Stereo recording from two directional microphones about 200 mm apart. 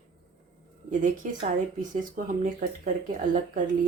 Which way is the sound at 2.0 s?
40° right (ahead or behind).